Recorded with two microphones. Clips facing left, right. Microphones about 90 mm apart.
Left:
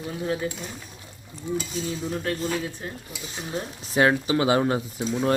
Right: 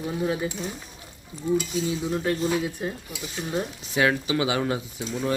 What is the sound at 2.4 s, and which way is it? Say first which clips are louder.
Speech: right 3 dB; 15° right (ahead or behind).